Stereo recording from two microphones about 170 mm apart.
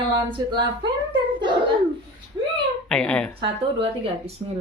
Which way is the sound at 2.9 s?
5° left (ahead or behind).